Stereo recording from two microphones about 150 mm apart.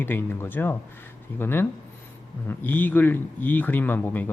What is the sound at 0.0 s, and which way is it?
A man's voice, 15° left (ahead or behind).